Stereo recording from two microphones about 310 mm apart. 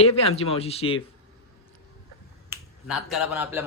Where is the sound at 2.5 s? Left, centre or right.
Centre.